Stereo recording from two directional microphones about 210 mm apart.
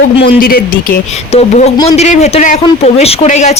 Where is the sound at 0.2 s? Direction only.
45° left (ahead or behind).